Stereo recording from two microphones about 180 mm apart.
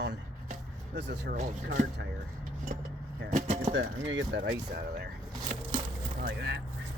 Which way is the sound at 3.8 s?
90° right.